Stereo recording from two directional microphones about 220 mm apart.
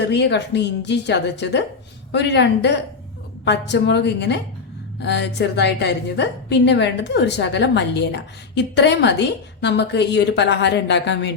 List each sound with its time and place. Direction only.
0.0 s a woman's voice: 50° left (ahead or behind)